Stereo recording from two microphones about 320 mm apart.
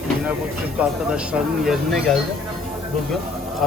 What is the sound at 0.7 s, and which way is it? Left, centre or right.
Speech, centre.